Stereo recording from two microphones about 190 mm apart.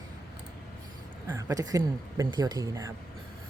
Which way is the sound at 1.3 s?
20° right (ahead or behind).